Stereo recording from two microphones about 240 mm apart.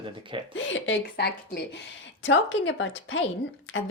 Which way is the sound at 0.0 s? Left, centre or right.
Right.